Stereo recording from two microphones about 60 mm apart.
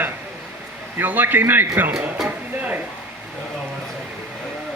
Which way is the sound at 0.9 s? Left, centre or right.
Right.